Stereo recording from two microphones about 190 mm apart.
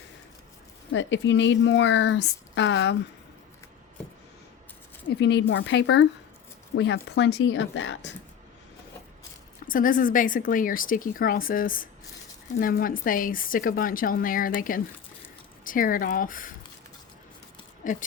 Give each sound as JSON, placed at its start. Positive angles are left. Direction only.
{"t": 0.9, "sound": "speech", "side_deg": 75}
{"t": 5.0, "sound": "speech", "side_deg": 70}
{"t": 9.6, "sound": "speech", "side_deg": 45}
{"t": 17.8, "sound": "speech", "side_deg": 45}